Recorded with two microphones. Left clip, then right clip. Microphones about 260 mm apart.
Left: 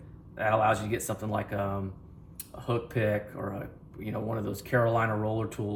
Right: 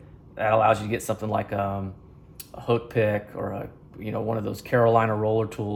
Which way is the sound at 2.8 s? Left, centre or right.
Right.